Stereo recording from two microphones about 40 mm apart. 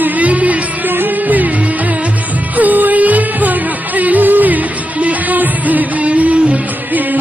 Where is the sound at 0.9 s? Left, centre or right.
Right.